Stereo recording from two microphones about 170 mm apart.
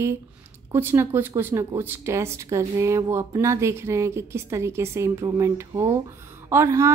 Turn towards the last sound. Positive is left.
turn(degrees=-15)  # may be behind; listen again after turning